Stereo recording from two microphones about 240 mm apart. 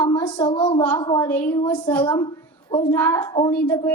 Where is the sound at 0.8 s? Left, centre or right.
Centre.